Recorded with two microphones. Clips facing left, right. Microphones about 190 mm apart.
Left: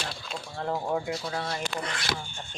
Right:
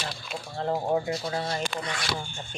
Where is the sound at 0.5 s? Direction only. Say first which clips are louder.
Right 3 dB; 40° right (ahead or behind).